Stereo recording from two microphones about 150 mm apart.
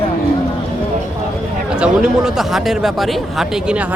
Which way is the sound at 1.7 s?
5° right (ahead or behind).